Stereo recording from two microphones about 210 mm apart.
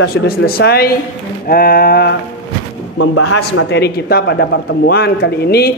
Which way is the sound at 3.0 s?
65° left (ahead or behind).